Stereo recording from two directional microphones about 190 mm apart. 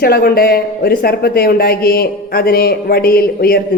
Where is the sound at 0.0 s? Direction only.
50° left (ahead or behind).